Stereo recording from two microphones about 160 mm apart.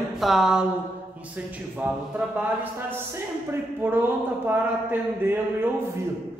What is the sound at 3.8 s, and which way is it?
Speech, 15° right (ahead or behind).